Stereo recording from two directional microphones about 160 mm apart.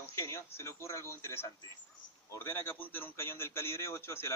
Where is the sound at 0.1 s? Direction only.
15° left (ahead or behind).